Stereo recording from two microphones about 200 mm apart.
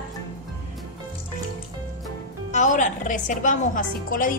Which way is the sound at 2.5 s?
40° left (ahead or behind).